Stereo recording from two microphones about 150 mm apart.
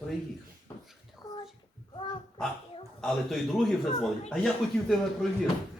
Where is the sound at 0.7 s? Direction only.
20° left (ahead or behind).